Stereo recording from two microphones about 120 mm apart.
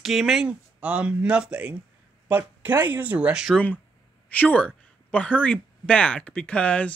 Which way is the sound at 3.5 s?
15° left (ahead or behind).